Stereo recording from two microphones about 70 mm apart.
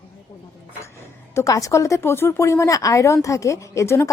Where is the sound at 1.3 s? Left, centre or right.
Left.